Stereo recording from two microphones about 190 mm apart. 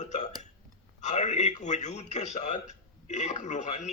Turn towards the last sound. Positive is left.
turn(degrees=40)  # may be behind; listen again after turning